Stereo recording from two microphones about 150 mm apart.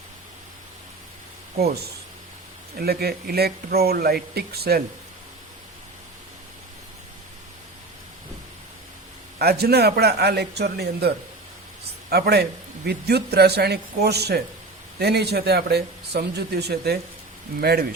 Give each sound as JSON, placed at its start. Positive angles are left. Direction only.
{"t": 1.5, "sound": "a man's voice", "side_deg": -90}
{"t": 9.4, "sound": "a man's voice", "side_deg": -90}
{"t": 12.1, "sound": "a man's voice", "side_deg": -90}